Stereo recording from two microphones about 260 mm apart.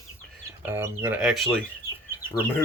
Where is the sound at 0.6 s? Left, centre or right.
Centre.